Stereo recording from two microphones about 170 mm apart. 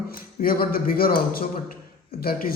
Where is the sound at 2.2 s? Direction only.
60° left (ahead or behind).